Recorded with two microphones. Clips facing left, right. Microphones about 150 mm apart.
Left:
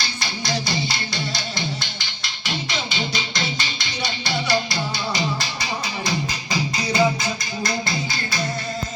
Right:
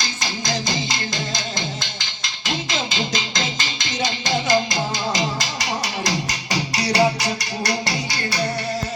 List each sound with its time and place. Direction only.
0.7 s music: 90° right
4.3 s music: 20° right (ahead or behind)
5.1 s music: 90° right; by 8.4 s 75° right (ahead or behind)